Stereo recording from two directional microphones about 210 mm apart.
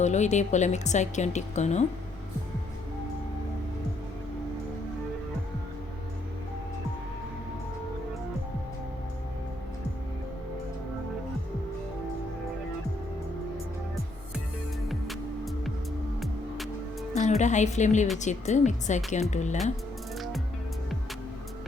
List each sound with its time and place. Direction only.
0.0 s a woman's voice: 35° left (ahead or behind)
14.8 s music: centre (ahead or behind)
17.2 s a woman's voice: 35° left (ahead or behind)
20.1 s music: centre (ahead or behind)